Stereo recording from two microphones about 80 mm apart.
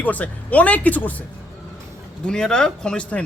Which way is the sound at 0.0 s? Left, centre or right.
Centre.